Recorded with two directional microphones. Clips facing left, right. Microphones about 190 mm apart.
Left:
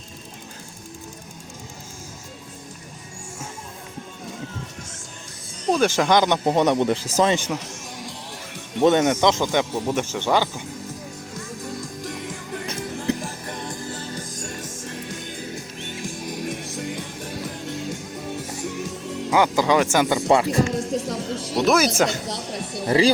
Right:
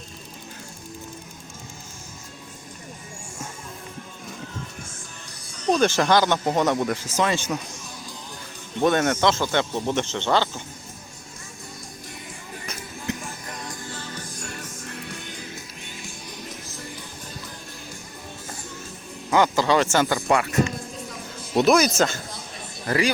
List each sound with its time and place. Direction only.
5.6 s speech: 10° left (ahead or behind); by 7.3 s 35° left (ahead or behind)
7.3 s speech: 15° left (ahead or behind)
8.8 s speech: 20° left (ahead or behind)
12.0 s music: 90° left
13.1 s music: 30° left (ahead or behind)
13.9 s music: 40° left (ahead or behind)
16.4 s music: 70° left (ahead or behind); by 19.3 s 90° left
19.3 s speech: 10° left (ahead or behind)
20.2 s speech: 30° left (ahead or behind)
20.7 s music: 90° left
21.9 s speech: 15° left (ahead or behind)
22.3 s a sound: 75° left (ahead or behind)
22.9 s speech: 30° left (ahead or behind)